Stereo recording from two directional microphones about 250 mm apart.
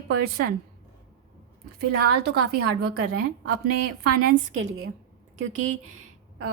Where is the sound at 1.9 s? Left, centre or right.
Right.